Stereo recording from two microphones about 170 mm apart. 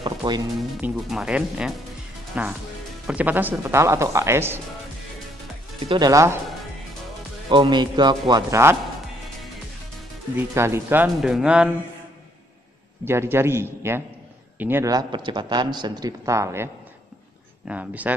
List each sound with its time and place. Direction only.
0.0 s music: 25° right (ahead or behind)
0.7 s speech: 5° right (ahead or behind)
5.8 s speech: 25° right (ahead or behind)
7.4 s speech: 25° right (ahead or behind)
10.3 s speech: 15° right (ahead or behind)
11.1 s speech: 5° right (ahead or behind)
13.0 s speech: 15° right (ahead or behind)